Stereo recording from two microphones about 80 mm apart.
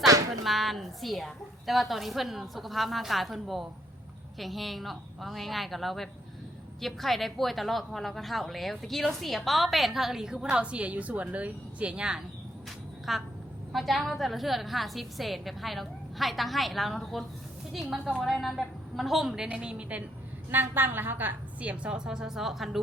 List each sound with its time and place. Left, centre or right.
0.4 s a woman's voice: centre
13.1 s a woman's voice: centre
19.5 s a woman's voice: centre
20.5 s a woman's voice: right; by 22.8 s centre